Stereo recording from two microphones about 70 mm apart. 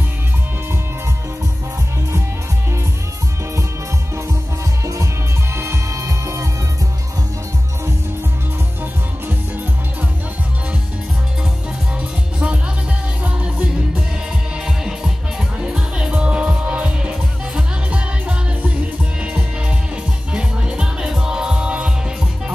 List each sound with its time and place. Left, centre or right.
5.6 s music: right
13.2 s music: centre
14.6 s music: centre
20.3 s music: centre